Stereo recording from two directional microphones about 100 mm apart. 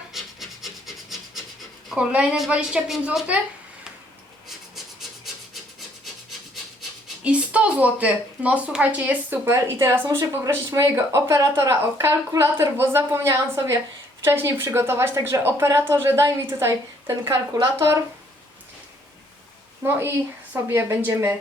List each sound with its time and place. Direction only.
0.1 s rub: centre (ahead or behind)
1.9 s a woman's voice: 5° right (ahead or behind)
4.4 s rub: 5° right (ahead or behind)
7.3 s a woman's voice: 10° right (ahead or behind)
9.5 s a woman's voice: 25° right (ahead or behind)
19.8 s a woman's voice: 25° right (ahead or behind)